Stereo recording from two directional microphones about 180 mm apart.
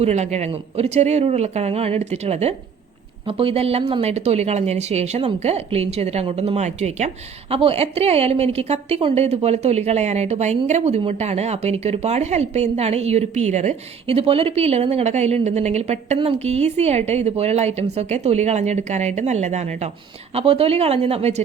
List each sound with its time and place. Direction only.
0.0 s a woman's voice: 40° right (ahead or behind)